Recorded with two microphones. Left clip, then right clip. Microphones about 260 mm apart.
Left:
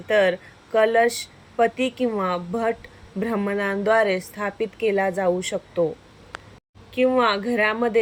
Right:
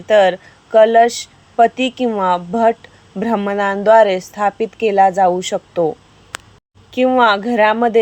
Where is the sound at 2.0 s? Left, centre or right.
Right.